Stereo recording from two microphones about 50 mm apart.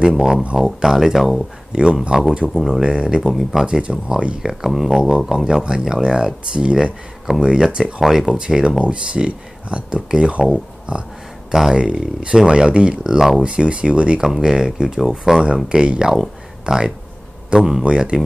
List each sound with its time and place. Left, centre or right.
0.1 s speech: centre
1.7 s speech: centre
2.5 s speech: centre
2.8 s speech: centre
4.4 s speech: centre
17.8 s speech: centre